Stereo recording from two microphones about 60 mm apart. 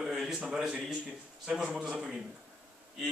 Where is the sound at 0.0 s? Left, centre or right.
Centre.